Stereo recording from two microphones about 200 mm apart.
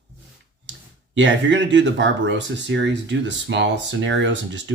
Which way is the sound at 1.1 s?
65° right (ahead or behind).